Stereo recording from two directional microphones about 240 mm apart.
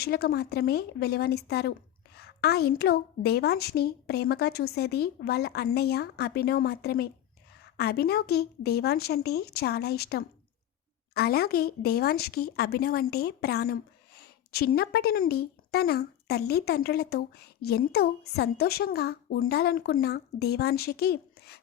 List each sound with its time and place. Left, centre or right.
0.0 s speech: left